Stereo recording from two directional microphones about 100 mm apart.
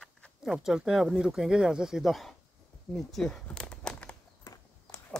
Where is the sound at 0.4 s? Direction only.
5° right (ahead or behind).